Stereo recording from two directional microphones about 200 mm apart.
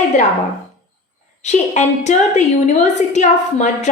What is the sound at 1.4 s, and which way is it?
A woman's voice, 35° left (ahead or behind).